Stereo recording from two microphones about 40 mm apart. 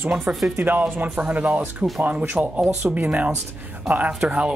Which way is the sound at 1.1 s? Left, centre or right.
Right.